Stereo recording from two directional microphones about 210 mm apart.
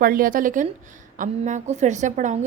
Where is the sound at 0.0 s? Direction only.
40° right (ahead or behind).